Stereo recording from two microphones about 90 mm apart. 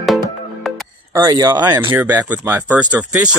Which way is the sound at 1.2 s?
50° right (ahead or behind).